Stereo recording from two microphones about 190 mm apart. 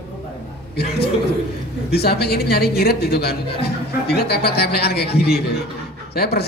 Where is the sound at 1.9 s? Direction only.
55° left (ahead or behind).